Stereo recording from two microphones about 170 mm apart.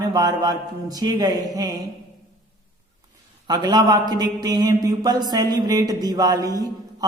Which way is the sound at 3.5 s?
25° right (ahead or behind).